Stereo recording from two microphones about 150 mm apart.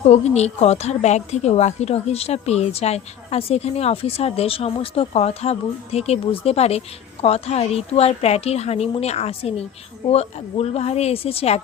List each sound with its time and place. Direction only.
0.1 s a woman's voice: 45° left (ahead or behind)